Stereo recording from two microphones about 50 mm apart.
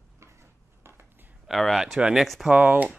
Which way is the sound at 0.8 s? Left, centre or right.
Right.